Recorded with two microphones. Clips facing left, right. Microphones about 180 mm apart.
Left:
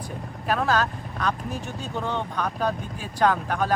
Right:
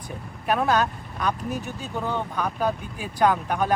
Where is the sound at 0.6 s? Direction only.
20° right (ahead or behind).